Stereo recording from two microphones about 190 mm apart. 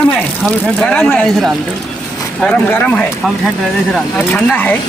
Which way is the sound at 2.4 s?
10° left (ahead or behind).